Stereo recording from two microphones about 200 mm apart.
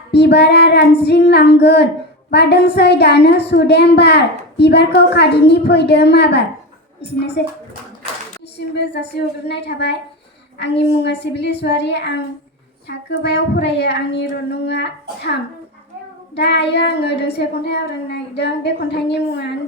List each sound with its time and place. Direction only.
0.1 s a woman's voice: 55° left (ahead or behind)
8.5 s a woman's voice: 55° left (ahead or behind)